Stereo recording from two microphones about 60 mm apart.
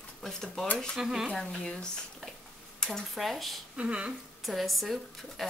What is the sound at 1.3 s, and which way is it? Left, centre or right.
Speech, centre.